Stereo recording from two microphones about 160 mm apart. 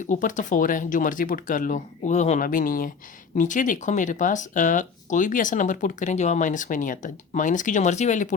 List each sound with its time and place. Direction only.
0.1 s speech: 55° left (ahead or behind)